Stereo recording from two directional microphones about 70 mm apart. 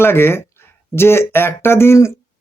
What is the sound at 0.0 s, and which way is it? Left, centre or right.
Speech, left.